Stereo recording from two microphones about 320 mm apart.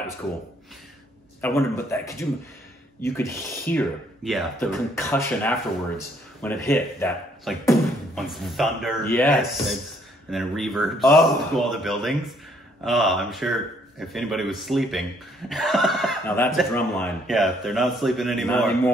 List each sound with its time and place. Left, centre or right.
1.4 s a man's voice: centre